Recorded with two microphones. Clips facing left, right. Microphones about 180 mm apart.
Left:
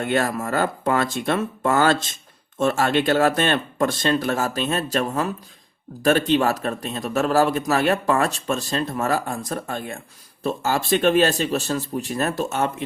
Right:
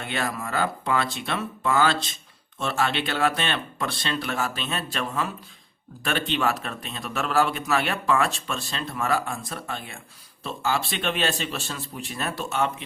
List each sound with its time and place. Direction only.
0.0 s a man's voice: 50° left (ahead or behind)